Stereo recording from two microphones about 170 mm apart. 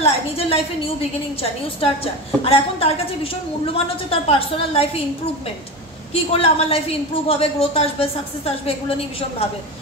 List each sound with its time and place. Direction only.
0.0 s a woman's voice: 35° left (ahead or behind)
1.8 s a woman's voice: 30° left (ahead or behind)
6.3 s a woman's voice: 35° left (ahead or behind)